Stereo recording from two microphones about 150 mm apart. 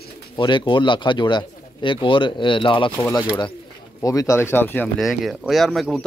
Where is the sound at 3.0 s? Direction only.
20° left (ahead or behind).